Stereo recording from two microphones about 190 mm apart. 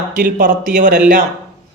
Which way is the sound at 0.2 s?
50° right (ahead or behind).